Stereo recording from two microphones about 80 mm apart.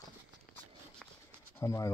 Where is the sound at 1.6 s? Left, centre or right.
Left.